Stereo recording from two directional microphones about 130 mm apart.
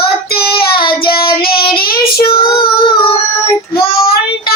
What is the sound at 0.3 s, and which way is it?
Child singing, 40° left (ahead or behind).